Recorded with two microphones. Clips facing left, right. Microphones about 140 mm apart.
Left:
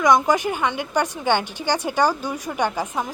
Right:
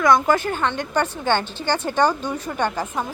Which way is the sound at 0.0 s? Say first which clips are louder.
Even; 15° left (ahead or behind).